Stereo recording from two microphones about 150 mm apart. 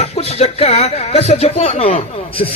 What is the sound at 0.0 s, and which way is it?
A man's voice, 45° left (ahead or behind).